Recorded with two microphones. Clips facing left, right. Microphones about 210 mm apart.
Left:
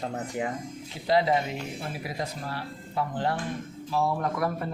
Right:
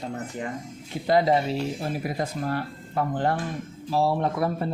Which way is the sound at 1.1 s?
40° right (ahead or behind).